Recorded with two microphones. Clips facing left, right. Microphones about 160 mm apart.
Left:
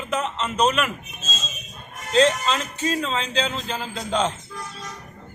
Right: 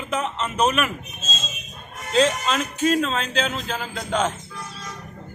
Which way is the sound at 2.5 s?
20° left (ahead or behind).